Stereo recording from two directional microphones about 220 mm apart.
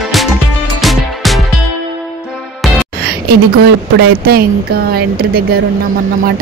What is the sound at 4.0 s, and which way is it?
A woman's voice, 45° right (ahead or behind).